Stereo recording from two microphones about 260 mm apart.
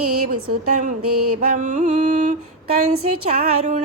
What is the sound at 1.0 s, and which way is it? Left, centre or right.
Speech, right.